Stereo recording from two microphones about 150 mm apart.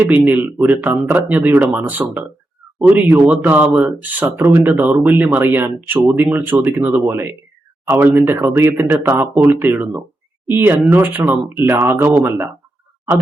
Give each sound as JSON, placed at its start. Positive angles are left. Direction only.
{"t": 0.0, "sound": "speech", "side_deg": -10}